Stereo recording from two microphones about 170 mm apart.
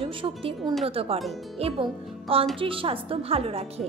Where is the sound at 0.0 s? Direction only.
35° right (ahead or behind).